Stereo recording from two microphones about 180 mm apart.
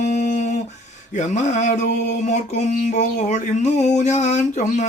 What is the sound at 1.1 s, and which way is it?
Mantra, 40° left (ahead or behind).